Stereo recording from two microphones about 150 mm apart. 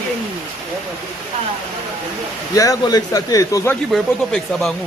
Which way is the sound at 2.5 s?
25° left (ahead or behind).